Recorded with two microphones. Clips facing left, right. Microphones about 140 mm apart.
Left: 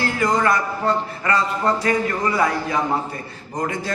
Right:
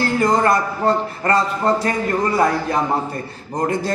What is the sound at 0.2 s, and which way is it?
A man's voice, 45° right (ahead or behind).